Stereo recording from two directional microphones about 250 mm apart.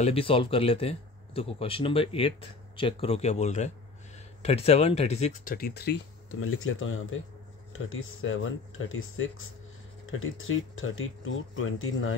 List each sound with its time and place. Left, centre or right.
0.0 s speech: left
6.4 s speech: left